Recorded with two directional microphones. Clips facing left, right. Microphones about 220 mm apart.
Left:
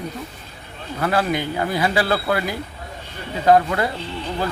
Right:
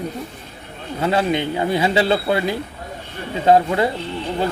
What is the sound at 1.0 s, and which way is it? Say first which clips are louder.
A man's voice: right 2 dB; 20° right (ahead or behind).